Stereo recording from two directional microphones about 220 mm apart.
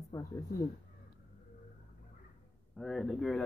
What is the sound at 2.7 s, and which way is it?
Speech, centre (ahead or behind).